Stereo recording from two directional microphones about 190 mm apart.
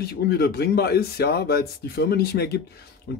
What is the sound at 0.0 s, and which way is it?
Speech, 55° left (ahead or behind).